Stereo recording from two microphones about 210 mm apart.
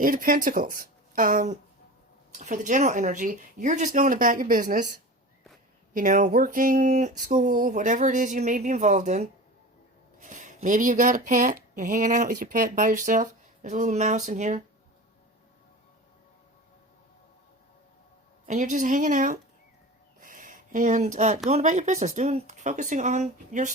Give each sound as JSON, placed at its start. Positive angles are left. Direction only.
{"t": 0.0, "sound": "speech", "side_deg": -40}
{"t": 5.9, "sound": "speech", "side_deg": -40}
{"t": 18.4, "sound": "speech", "side_deg": -35}